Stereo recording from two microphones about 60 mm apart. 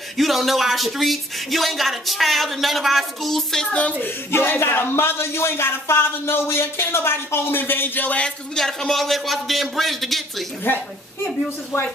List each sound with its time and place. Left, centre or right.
0.2 s speech: centre
4.0 s a man's voice: left
8.5 s speech: centre
10.7 s a man's voice: left